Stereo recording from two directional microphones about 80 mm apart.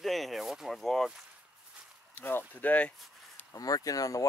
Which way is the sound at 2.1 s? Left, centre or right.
Left.